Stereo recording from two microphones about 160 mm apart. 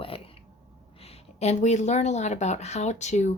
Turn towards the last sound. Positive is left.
turn(degrees=45)  # may be behind; listen again after turning